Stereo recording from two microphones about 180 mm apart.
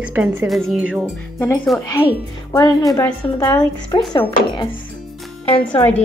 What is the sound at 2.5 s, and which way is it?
A woman's voice, 20° left (ahead or behind).